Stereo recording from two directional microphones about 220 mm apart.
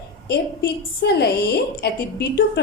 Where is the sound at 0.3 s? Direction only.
45° left (ahead or behind).